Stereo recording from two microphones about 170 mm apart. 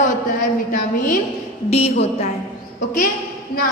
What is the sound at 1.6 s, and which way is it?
Speech, 35° left (ahead or behind).